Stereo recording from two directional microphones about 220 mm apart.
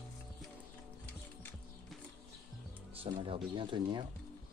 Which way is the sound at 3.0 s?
25° right (ahead or behind).